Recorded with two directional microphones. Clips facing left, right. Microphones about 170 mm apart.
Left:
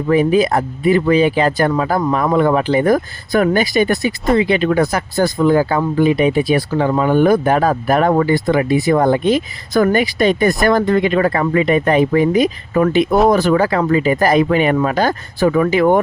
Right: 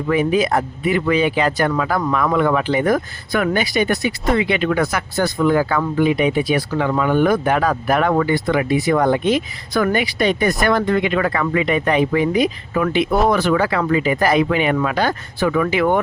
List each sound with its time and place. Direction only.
0.1 s speech: 35° left (ahead or behind)